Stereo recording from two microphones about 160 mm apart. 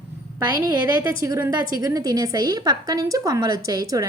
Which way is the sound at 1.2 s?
20° right (ahead or behind).